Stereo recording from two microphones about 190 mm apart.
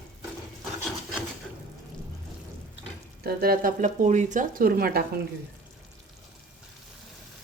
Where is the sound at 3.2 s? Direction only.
55° right (ahead or behind).